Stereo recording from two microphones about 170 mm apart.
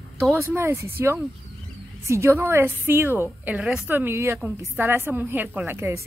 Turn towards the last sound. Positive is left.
turn(degrees=-15)  # may be behind; listen again after turning